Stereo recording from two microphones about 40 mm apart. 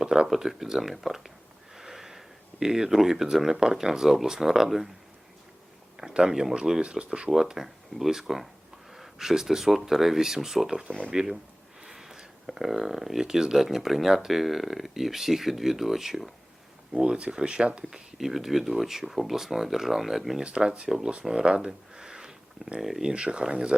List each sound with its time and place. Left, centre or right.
0.0 s a sound: centre
0.3 s speech: centre
6.1 s speech: right
7.3 s speech: centre
11.8 s a sound: centre
13.2 s speech: centre
17.0 s speech: right
17.9 s speech: centre
20.4 s speech: right
21.7 s a sound: centre
22.8 s speech: centre
23.0 s speech: right